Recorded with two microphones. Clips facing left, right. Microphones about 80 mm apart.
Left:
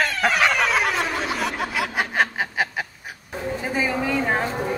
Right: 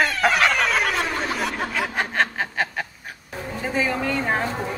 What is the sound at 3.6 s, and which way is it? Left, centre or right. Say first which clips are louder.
Speech: right 1 dB; centre.